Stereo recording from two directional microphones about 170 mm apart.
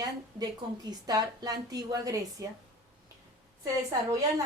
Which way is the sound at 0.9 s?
25° right (ahead or behind).